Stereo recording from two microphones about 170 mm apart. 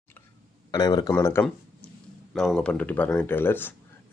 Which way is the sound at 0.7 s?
25° left (ahead or behind).